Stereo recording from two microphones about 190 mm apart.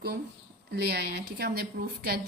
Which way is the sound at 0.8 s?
55° right (ahead or behind).